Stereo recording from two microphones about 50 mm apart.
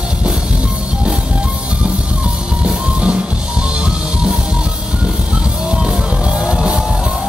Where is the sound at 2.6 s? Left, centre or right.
Right.